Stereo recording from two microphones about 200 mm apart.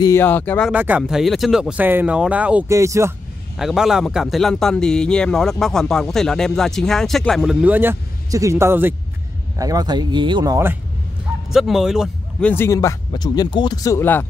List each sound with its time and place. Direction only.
0.0 s speech: 10° left (ahead or behind)
0.7 s speech: 5° right (ahead or behind)
3.5 s a man's voice: centre (ahead or behind)
11.5 s speech: centre (ahead or behind)